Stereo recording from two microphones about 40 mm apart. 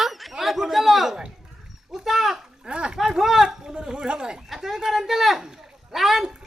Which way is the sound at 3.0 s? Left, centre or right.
Centre.